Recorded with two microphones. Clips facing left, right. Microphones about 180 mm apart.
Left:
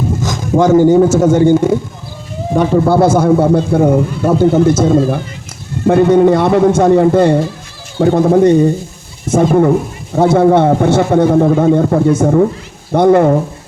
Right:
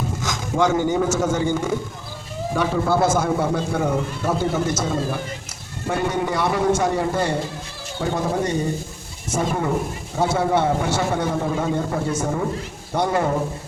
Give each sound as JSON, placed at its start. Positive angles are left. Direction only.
{"t": 0.2, "sound": "a man's voice", "side_deg": 45}